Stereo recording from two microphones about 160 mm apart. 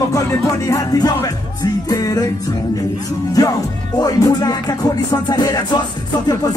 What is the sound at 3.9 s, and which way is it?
Music, 25° left (ahead or behind).